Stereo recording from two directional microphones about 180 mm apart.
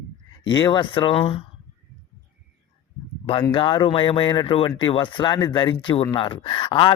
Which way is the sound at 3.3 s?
25° left (ahead or behind).